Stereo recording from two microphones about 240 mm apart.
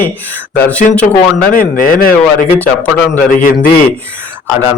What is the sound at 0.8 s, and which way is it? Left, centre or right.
Speech, left.